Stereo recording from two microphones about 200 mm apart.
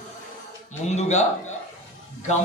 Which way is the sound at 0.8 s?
35° left (ahead or behind).